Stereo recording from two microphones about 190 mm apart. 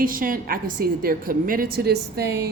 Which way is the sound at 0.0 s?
45° right (ahead or behind).